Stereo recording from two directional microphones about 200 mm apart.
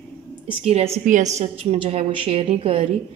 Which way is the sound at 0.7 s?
30° right (ahead or behind).